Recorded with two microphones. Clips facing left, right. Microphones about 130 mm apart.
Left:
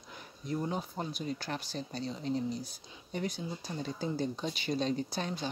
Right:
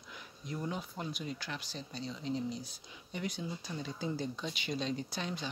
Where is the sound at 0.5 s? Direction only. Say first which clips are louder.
Left 4 dB; 35° left (ahead or behind).